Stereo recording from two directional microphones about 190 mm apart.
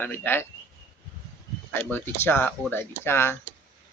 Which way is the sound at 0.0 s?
10° left (ahead or behind).